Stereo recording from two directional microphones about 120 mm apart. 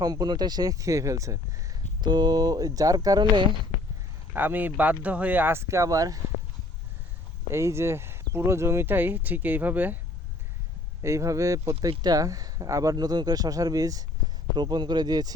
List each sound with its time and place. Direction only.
0.0 s speech: 35° right (ahead or behind)
4.4 s speech: 15° right (ahead or behind)
7.5 s speech: 20° right (ahead or behind)
11.0 s speech: 25° right (ahead or behind)